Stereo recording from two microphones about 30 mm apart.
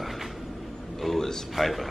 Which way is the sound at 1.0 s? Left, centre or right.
Centre.